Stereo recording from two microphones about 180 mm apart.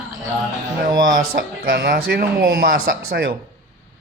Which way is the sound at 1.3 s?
60° right (ahead or behind).